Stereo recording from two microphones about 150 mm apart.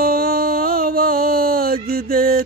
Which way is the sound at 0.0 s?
85° right.